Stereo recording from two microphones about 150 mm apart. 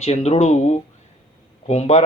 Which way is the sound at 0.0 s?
45° left (ahead or behind).